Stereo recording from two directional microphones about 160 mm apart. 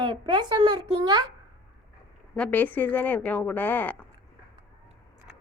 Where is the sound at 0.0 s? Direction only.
30° right (ahead or behind).